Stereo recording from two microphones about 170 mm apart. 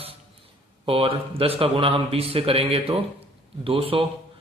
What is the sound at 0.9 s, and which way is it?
A man's voice, 35° right (ahead or behind).